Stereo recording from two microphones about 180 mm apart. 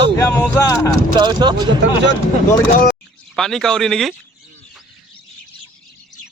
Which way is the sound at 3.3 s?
5° left (ahead or behind).